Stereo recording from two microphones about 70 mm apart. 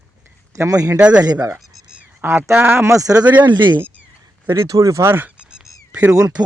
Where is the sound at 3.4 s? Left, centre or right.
Right.